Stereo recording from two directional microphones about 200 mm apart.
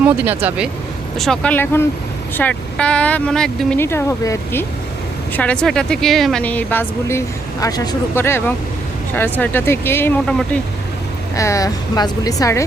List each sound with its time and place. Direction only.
0.4 s speech: 5° right (ahead or behind)
11.3 s speech: 15° left (ahead or behind)